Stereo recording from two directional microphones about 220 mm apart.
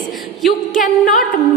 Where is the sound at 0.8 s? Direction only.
35° left (ahead or behind).